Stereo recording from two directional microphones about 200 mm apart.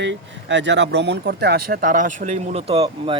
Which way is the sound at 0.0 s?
65° right (ahead or behind).